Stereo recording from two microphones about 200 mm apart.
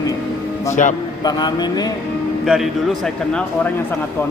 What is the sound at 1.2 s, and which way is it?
Speech, 20° left (ahead or behind).